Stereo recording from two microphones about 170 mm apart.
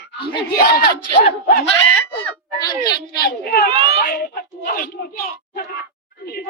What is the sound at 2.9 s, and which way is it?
Speech, 25° left (ahead or behind).